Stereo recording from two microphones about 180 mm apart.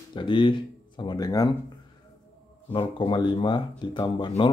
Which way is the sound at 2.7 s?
30° left (ahead or behind).